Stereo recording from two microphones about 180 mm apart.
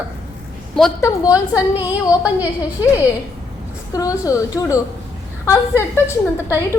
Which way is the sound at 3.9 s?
20° left (ahead or behind).